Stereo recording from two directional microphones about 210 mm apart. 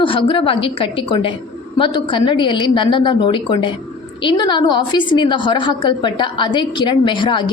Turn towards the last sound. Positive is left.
turn(degrees=20)  # may be behind; listen again after turning